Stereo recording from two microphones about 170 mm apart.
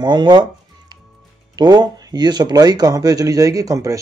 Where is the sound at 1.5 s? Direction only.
25° right (ahead or behind).